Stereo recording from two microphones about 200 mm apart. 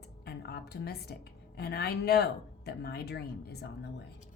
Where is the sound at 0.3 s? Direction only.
55° left (ahead or behind).